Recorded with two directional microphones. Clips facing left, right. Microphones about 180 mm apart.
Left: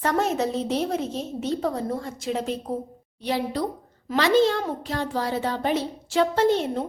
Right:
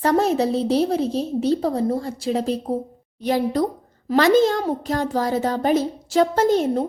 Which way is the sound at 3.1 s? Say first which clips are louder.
Right 6 dB; 45° right (ahead or behind).